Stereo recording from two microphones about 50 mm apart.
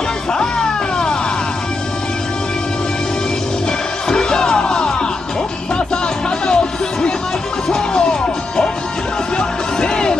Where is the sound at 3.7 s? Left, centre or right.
Centre.